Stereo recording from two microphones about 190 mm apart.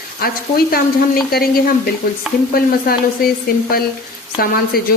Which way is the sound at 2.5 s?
50° left (ahead or behind).